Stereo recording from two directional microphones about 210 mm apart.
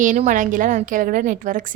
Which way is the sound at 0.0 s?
40° right (ahead or behind).